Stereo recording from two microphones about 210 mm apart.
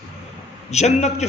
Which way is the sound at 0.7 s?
30° left (ahead or behind).